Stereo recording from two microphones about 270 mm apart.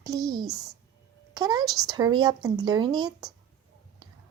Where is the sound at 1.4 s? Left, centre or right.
Centre.